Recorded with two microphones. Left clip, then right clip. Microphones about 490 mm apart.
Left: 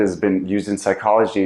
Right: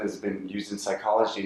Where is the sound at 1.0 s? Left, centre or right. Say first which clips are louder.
Left 8 dB; left.